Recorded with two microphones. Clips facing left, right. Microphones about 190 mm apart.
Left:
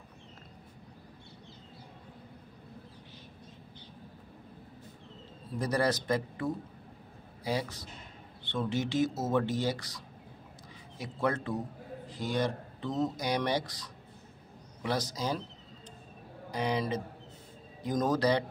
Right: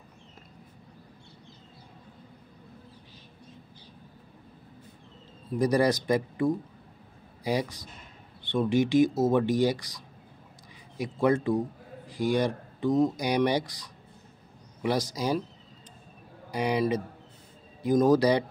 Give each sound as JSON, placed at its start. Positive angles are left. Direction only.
{"t": 5.5, "sound": "speech", "side_deg": -15}
{"t": 16.4, "sound": "a man's voice", "side_deg": -10}